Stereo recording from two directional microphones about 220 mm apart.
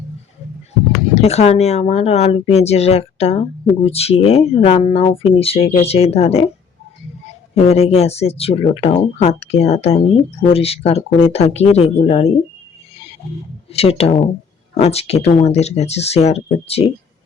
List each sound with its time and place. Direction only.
1.1 s speech: 30° left (ahead or behind)
7.5 s speech: 30° left (ahead or behind)
13.7 s speech: 25° left (ahead or behind)